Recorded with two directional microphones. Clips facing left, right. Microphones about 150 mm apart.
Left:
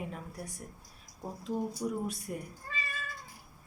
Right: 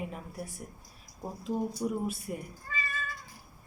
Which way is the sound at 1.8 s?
5° right (ahead or behind).